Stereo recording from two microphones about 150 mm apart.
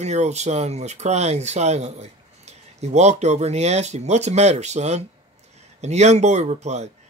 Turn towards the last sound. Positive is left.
turn(degrees=-50)  # may be behind; listen again after turning